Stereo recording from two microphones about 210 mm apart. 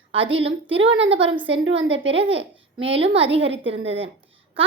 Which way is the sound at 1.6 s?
65° right (ahead or behind).